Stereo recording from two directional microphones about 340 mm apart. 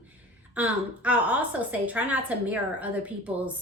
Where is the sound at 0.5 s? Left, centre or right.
Centre.